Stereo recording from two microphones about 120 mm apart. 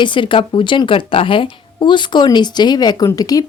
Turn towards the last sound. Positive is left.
turn(degrees=30)  # may be behind; listen again after turning